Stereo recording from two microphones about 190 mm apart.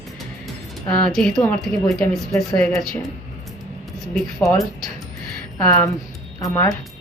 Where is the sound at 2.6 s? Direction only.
5° left (ahead or behind).